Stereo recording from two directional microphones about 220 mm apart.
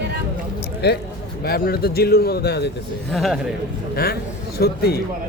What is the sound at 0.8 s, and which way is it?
Speech, 50° left (ahead or behind).